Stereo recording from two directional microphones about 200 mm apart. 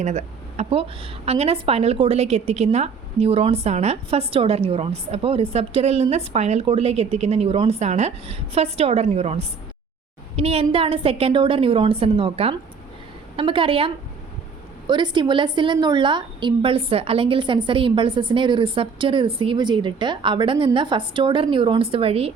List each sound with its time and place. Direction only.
0.0 s a woman's voice: 35° right (ahead or behind)